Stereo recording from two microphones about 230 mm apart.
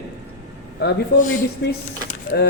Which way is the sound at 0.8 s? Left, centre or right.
Left.